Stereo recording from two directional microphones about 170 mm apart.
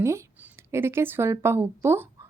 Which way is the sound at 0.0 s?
15° right (ahead or behind).